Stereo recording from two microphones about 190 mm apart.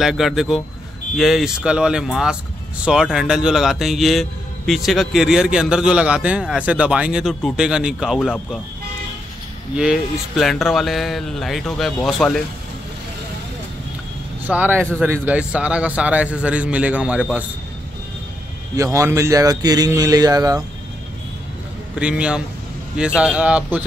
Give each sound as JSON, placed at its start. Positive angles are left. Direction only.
{"t": 0.0, "sound": "a man's voice", "side_deg": 0}
{"t": 9.8, "sound": "a man's voice", "side_deg": 0}
{"t": 14.5, "sound": "a man's voice", "side_deg": -10}
{"t": 18.8, "sound": "speech", "side_deg": -15}
{"t": 21.9, "sound": "a man's voice", "side_deg": -5}